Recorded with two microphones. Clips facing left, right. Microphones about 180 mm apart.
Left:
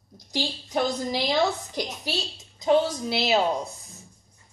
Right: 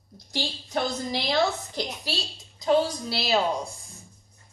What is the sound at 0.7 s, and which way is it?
A woman's voice, 10° left (ahead or behind).